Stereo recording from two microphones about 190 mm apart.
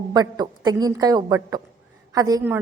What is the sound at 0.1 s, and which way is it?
A woman's voice, 20° right (ahead or behind).